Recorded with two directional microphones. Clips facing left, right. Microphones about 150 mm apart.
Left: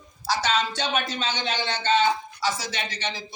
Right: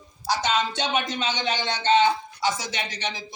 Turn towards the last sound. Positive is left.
turn(degrees=-15)  # may be behind; listen again after turning